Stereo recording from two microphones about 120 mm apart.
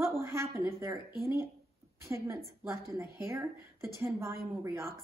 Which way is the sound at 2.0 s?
20° right (ahead or behind).